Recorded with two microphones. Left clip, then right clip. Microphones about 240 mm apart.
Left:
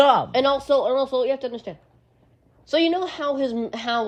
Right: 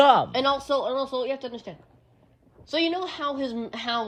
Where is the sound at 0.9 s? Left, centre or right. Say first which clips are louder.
Left 6 dB; centre.